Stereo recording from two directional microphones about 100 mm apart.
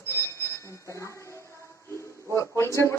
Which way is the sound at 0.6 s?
30° left (ahead or behind).